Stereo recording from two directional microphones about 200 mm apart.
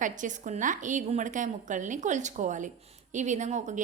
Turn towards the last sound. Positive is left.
turn(degrees=-35)  # may be behind; listen again after turning